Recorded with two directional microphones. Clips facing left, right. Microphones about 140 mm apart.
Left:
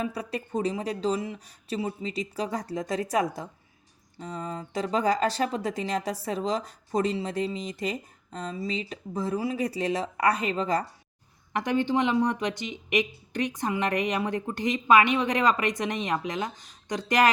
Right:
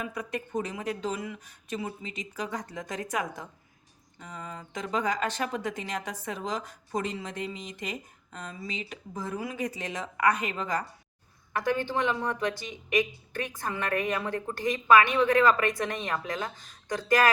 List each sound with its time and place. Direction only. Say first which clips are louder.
0.0 s speech: left 3 dB; 35° left (ahead or behind)
11.5 s speech: left 3 dB; 20° left (ahead or behind)